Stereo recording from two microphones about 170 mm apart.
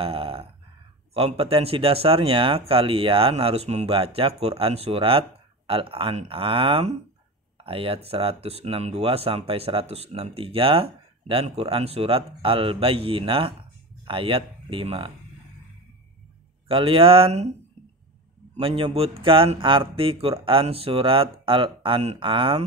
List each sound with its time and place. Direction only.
0.0 s a sound: 30° right (ahead or behind)
1.1 s speech: 35° right (ahead or behind)
16.6 s speech: 30° right (ahead or behind)
18.6 s speech: 30° right (ahead or behind)